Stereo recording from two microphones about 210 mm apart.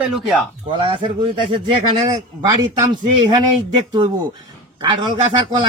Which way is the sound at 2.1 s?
20° right (ahead or behind).